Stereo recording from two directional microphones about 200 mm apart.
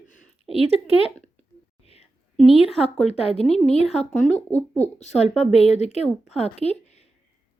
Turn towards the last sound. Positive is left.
turn(degrees=30)  # may be behind; listen again after turning